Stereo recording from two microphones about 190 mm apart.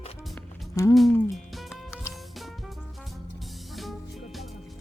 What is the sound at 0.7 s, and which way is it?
Speech, 15° left (ahead or behind).